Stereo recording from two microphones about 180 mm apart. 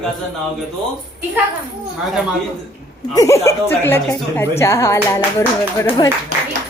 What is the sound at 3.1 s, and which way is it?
A woman's voice, 20° left (ahead or behind).